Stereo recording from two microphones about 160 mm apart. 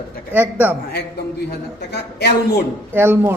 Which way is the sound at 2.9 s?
15° right (ahead or behind).